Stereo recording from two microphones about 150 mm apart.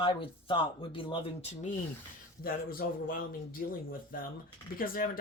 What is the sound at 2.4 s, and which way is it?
Speech, 75° left (ahead or behind).